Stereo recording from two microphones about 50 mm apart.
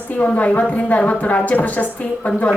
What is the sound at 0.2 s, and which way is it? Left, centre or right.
A woman's voice, left.